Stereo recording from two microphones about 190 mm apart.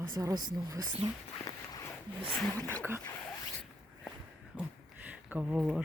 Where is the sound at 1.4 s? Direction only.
20° left (ahead or behind).